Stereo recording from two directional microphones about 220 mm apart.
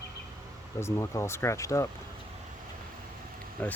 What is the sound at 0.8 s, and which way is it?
Speech, 10° left (ahead or behind).